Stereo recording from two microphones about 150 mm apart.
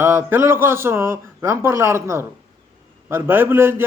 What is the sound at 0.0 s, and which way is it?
A man's voice, 15° right (ahead or behind).